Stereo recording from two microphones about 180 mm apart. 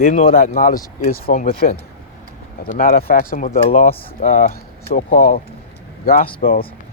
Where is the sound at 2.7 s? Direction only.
50° left (ahead or behind).